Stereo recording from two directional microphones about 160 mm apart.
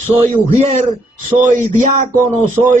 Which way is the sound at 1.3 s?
55° right (ahead or behind).